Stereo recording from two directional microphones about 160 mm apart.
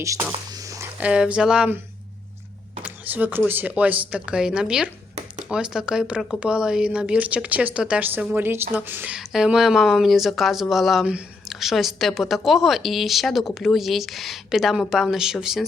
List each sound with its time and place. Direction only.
0.0 s whispering: 20° right (ahead or behind)
0.9 s a woman's voice: 5° right (ahead or behind)
2.8 s a woman's voice: 10° right (ahead or behind)